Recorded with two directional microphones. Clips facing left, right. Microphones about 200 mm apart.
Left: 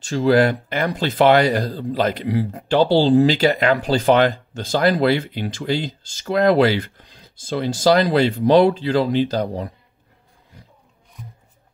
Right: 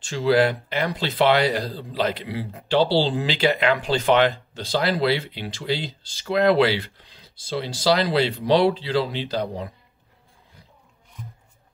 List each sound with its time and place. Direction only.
0.0 s speech: 50° left (ahead or behind)